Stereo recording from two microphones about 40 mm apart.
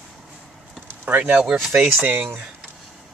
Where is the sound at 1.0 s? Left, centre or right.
Right.